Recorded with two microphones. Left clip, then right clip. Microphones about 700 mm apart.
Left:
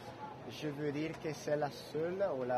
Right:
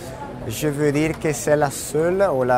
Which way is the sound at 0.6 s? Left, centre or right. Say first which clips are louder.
Right 19 dB; right.